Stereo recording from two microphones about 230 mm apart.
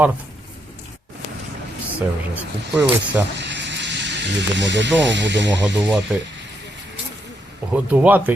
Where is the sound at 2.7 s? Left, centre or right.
Centre.